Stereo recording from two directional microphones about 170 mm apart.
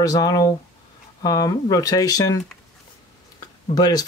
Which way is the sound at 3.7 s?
20° left (ahead or behind).